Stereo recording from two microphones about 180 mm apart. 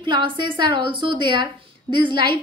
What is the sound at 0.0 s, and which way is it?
A woman's voice, 25° right (ahead or behind).